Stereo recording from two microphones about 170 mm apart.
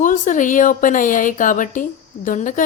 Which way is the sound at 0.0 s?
50° left (ahead or behind).